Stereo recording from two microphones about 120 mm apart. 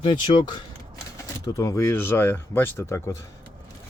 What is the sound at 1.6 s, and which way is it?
Speech, 25° left (ahead or behind).